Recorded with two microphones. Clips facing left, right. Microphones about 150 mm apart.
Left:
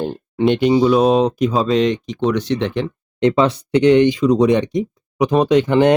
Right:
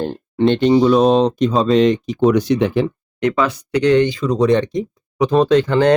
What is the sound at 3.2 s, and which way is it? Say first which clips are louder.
Speech: left 3 dB; 25° left (ahead or behind).